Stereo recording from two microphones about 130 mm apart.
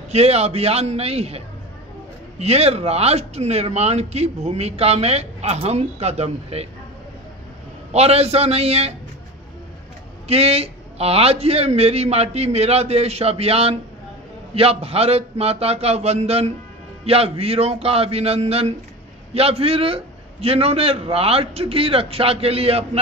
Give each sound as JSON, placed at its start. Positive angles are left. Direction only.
{"t": 0.1, "sound": "a man's voice", "side_deg": -55}
{"t": 7.9, "sound": "a man's voice", "side_deg": -55}
{"t": 10.2, "sound": "a man's voice", "side_deg": -50}